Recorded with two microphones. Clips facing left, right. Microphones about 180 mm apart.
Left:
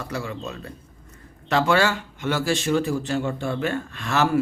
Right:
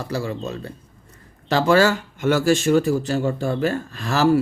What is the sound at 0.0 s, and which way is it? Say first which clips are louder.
Speech: right 4 dB; 35° right (ahead or behind).